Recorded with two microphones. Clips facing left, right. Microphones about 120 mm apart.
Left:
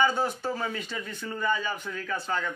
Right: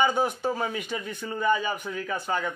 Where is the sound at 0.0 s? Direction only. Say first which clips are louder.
Right 2 dB; 15° right (ahead or behind).